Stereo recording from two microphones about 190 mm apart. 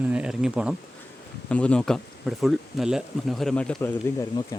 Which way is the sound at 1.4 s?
5° left (ahead or behind).